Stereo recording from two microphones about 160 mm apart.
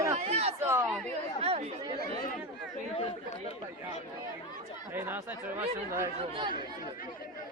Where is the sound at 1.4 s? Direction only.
40° right (ahead or behind).